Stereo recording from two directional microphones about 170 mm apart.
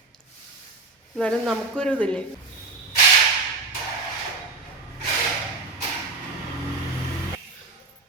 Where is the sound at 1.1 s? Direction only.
5° left (ahead or behind).